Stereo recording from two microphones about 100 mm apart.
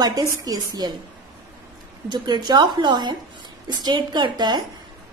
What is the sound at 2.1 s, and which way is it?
A woman's voice, 45° right (ahead or behind).